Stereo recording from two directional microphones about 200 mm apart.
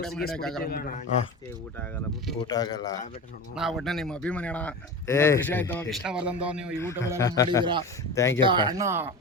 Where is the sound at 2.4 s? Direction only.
20° left (ahead or behind).